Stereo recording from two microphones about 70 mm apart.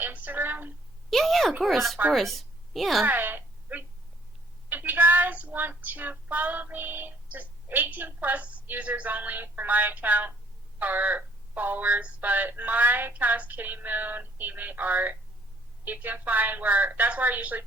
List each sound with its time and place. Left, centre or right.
0.0 s a woman's voice: right
1.1 s a woman's voice: centre
3.0 s a sound: right
4.7 s child singing: right